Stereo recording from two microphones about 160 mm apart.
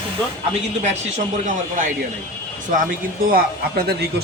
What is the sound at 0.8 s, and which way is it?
Speech, 50° right (ahead or behind).